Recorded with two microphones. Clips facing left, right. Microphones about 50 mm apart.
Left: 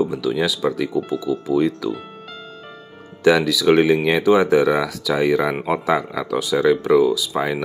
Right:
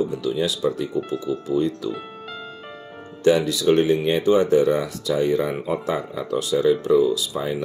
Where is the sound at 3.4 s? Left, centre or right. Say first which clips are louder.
Left 3 dB; left.